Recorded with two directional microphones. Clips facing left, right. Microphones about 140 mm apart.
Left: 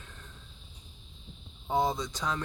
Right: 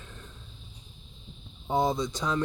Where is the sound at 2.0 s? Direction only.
30° right (ahead or behind).